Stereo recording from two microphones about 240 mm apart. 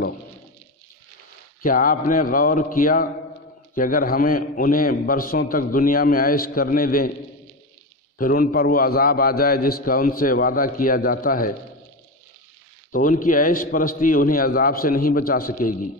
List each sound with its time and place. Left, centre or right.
1.6 s a man's voice: left
8.2 s a man's voice: left
12.9 s a man's voice: left